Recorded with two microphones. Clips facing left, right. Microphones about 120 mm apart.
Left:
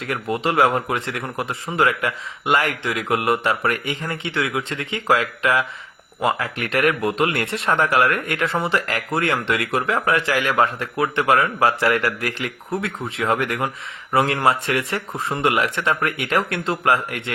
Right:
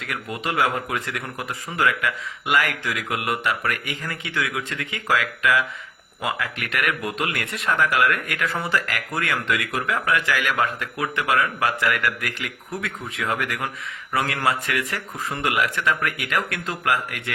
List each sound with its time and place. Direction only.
0.0 s speech: 30° left (ahead or behind)